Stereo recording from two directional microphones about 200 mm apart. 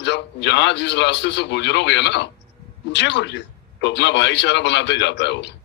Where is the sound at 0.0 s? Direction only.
60° left (ahead or behind).